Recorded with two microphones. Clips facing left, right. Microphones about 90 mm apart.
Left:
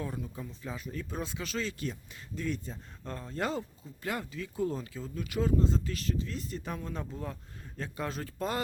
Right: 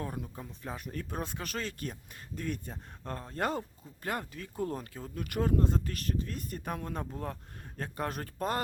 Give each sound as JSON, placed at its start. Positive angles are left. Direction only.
{"t": 0.0, "sound": "speech", "side_deg": -45}